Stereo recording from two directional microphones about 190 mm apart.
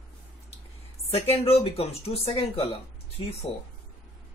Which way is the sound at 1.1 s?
30° left (ahead or behind).